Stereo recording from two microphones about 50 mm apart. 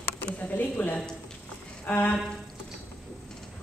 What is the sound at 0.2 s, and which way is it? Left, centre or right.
Speech, left.